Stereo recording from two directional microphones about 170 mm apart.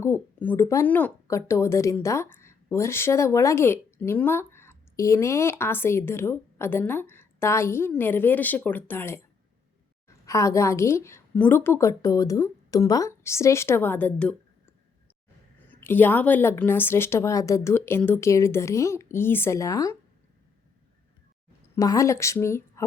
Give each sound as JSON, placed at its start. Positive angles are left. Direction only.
{"t": 0.0, "sound": "speech", "side_deg": 10}
{"t": 10.2, "sound": "speech", "side_deg": 20}
{"t": 15.7, "sound": "speech", "side_deg": 10}
{"t": 21.8, "sound": "speech", "side_deg": 20}